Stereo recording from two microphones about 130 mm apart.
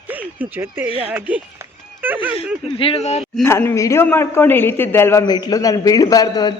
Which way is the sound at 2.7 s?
45° left (ahead or behind).